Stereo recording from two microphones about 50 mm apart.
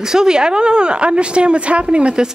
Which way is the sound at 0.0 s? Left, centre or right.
Centre.